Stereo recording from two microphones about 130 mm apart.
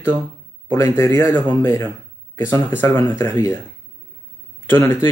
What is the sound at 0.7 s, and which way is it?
Speech, 25° left (ahead or behind).